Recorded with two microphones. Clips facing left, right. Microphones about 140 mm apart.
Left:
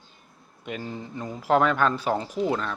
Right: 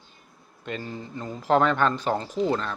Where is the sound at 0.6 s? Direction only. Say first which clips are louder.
Even; 10° left (ahead or behind).